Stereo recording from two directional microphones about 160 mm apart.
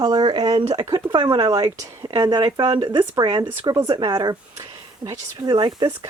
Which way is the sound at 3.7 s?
25° right (ahead or behind).